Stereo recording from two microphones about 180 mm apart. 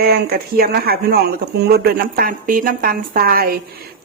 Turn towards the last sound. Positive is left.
turn(degrees=-55)  # may be behind; listen again after turning